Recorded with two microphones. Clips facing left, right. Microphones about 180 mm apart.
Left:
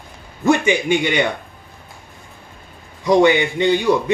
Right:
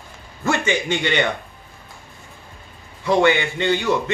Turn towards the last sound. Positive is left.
turn(degrees=15)  # may be behind; listen again after turning